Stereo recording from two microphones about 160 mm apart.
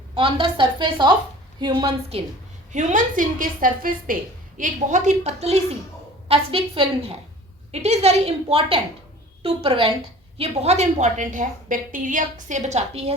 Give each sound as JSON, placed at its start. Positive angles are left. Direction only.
{"t": 0.2, "sound": "a woman's voice", "side_deg": -30}
{"t": 2.7, "sound": "a woman's voice", "side_deg": -55}